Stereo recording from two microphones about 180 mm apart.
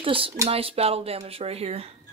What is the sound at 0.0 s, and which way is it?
Speech, 30° right (ahead or behind).